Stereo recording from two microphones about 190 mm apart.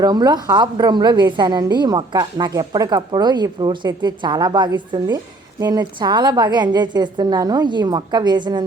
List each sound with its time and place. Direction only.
0.0 s a woman's voice: 20° right (ahead or behind)